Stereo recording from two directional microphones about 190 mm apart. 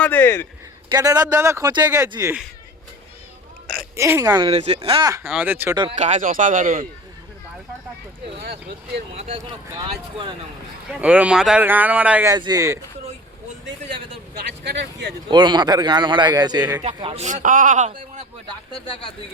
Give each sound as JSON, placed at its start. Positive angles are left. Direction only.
{"t": 0.0, "sound": "a sound", "side_deg": 10}
{"t": 0.9, "sound": "speech", "side_deg": -20}
{"t": 3.9, "sound": "speech", "side_deg": -15}
{"t": 4.4, "sound": "speech", "side_deg": -35}
{"t": 5.7, "sound": "speech", "side_deg": -25}
{"t": 6.0, "sound": "speech", "side_deg": -40}
{"t": 8.4, "sound": "speech", "side_deg": -60}
{"t": 9.1, "sound": "speech", "side_deg": -35}
{"t": 10.8, "sound": "speech", "side_deg": -5}
{"t": 12.3, "sound": "speech", "side_deg": -20}
{"t": 14.6, "sound": "speech", "side_deg": -70}
{"t": 15.3, "sound": "speech", "side_deg": -25}
{"t": 16.8, "sound": "speech", "side_deg": -30}